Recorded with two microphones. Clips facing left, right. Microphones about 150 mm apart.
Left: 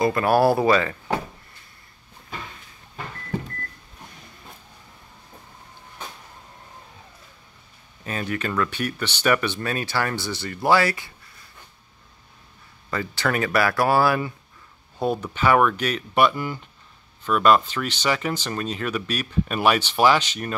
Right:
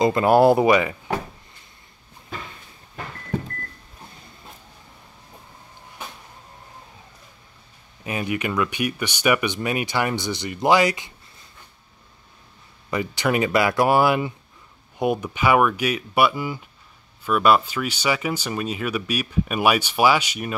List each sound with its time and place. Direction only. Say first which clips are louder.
0.0 s speech: right 3 dB; 20° right (ahead or behind)
8.0 s speech: right 2 dB; 15° right (ahead or behind)
12.9 s speech: right 3 dB; 15° right (ahead or behind)